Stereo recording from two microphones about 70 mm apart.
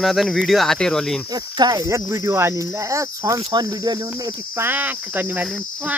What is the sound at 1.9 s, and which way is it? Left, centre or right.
Speech, right.